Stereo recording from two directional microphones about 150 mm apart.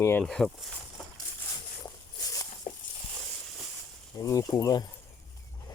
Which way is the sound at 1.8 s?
25° left (ahead or behind).